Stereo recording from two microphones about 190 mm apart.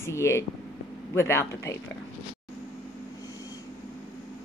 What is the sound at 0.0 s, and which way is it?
A man's voice, 15° left (ahead or behind).